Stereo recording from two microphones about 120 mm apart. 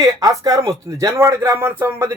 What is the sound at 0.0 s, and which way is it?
Speech, 30° right (ahead or behind).